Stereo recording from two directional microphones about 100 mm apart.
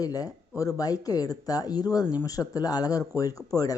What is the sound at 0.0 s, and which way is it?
Speech, 35° left (ahead or behind).